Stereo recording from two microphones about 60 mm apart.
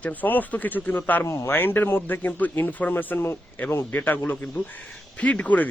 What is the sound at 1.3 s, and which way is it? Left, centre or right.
Speech, left.